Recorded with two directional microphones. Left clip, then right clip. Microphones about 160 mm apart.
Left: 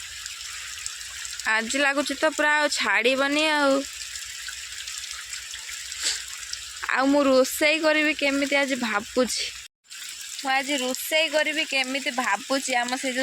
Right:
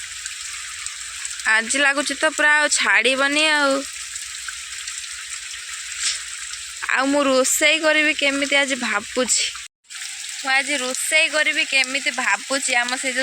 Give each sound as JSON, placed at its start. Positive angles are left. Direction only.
{"t": 1.5, "sound": "speech", "side_deg": 5}
{"t": 6.8, "sound": "speech", "side_deg": 10}
{"t": 10.4, "sound": "speech", "side_deg": 25}